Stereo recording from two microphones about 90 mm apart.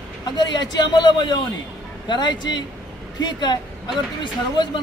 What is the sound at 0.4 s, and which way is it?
A man's voice, 50° left (ahead or behind).